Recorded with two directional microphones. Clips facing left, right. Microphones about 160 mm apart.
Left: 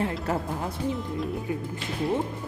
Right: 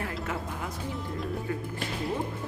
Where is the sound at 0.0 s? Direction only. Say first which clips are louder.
Left 6 dB; 30° left (ahead or behind).